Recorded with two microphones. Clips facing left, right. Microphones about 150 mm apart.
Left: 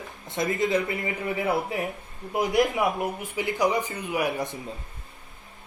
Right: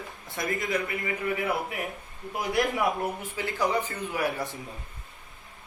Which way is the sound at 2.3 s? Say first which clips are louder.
Left 4 dB; 20° left (ahead or behind).